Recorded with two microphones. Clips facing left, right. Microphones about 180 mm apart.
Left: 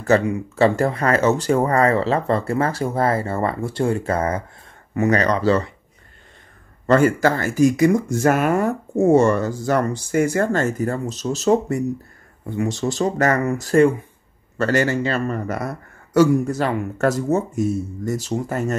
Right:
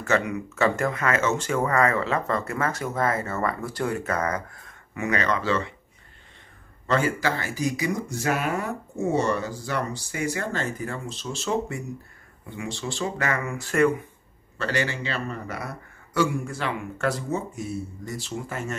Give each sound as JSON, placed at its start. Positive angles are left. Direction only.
{"t": 0.0, "sound": "speech", "side_deg": 30}
{"t": 6.9, "sound": "speech", "side_deg": 45}
{"t": 14.6, "sound": "speech", "side_deg": 45}